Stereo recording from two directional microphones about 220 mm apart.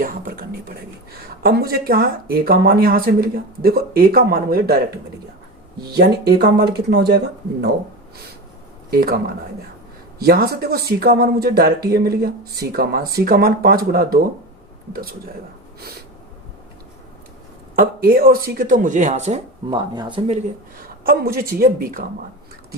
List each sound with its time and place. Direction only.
0.0 s a sound: 40° right (ahead or behind)
1.4 s speech: 45° right (ahead or behind)
5.9 s speech: 45° right (ahead or behind)
8.9 s speech: 45° right (ahead or behind)
17.7 s speech: 40° right (ahead or behind); by 20.4 s 25° right (ahead or behind)
21.1 s speech: 40° right (ahead or behind)